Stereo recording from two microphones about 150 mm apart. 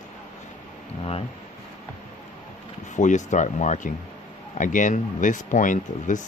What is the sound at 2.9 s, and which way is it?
Speech, 55° left (ahead or behind).